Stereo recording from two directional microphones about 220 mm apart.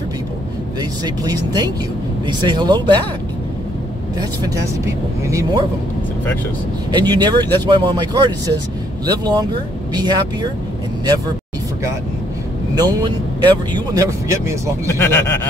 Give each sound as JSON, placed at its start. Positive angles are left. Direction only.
{"t": 0.7, "sound": "speech", "side_deg": -15}
{"t": 4.2, "sound": "speech", "side_deg": -15}
{"t": 6.9, "sound": "speech", "side_deg": -20}
{"t": 12.7, "sound": "speech", "side_deg": -20}
{"t": 14.9, "sound": "speech", "side_deg": 10}